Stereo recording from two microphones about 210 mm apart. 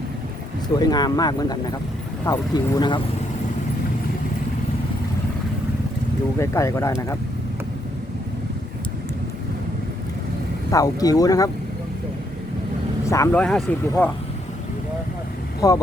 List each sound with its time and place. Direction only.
0.8 s speech: 20° left (ahead or behind)
6.4 s speech: 15° left (ahead or behind)
10.7 s speech: 15° left (ahead or behind)
13.1 s speech: 15° left (ahead or behind)
13.4 s speech: 5° left (ahead or behind)
15.6 s speech: 15° left (ahead or behind)